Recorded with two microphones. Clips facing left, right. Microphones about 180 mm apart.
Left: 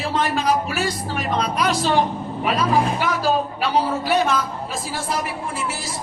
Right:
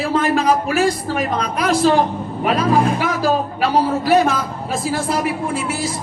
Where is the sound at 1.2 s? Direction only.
50° right (ahead or behind).